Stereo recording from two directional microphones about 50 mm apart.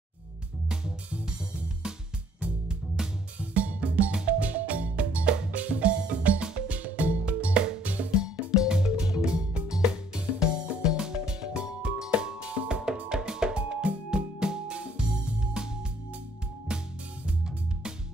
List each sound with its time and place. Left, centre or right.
1.1 s music: centre
3.0 s music: centre
3.5 s music: right
8.2 s music: centre